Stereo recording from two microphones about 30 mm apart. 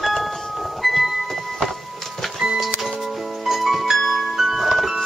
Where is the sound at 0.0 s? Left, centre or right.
Centre.